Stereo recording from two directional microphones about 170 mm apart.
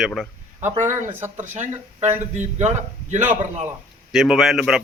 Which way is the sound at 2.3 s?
45° right (ahead or behind).